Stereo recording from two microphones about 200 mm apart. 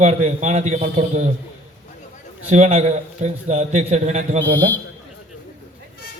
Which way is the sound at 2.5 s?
40° right (ahead or behind).